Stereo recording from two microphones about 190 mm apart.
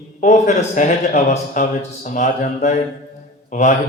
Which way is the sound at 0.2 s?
40° left (ahead or behind).